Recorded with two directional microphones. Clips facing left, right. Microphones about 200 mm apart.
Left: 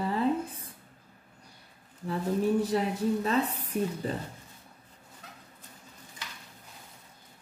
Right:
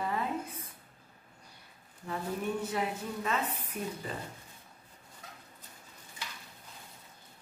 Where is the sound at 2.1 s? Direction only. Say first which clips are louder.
Left 7 dB; 35° left (ahead or behind).